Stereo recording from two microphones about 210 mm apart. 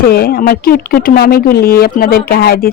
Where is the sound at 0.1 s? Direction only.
45° left (ahead or behind).